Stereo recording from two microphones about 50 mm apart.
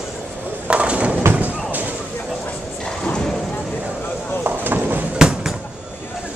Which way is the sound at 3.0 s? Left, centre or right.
Centre.